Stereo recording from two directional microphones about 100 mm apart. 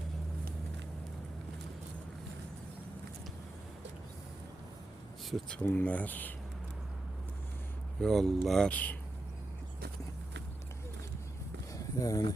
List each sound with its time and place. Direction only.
5.5 s speech: 15° left (ahead or behind)
8.0 s speech: 5° left (ahead or behind)
8.7 s speech: 15° left (ahead or behind)
11.7 s a sound: 35° left (ahead or behind)